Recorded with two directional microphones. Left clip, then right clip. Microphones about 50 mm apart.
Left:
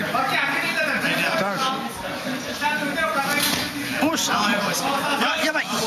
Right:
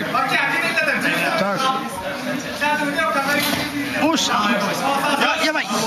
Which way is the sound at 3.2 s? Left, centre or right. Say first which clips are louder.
Right 3 dB; centre.